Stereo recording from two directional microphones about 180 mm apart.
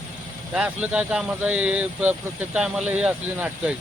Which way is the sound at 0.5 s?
5° right (ahead or behind).